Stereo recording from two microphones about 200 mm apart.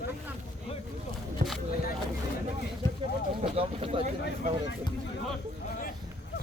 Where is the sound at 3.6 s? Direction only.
30° right (ahead or behind).